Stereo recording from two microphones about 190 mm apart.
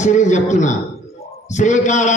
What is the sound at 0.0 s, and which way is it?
A man's voice, 40° left (ahead or behind).